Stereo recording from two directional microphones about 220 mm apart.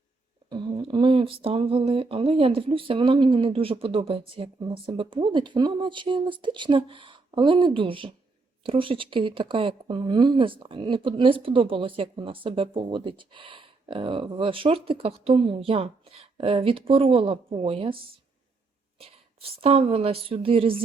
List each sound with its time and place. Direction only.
0.5 s speech: 20° right (ahead or behind)
18.9 s speech: 25° right (ahead or behind)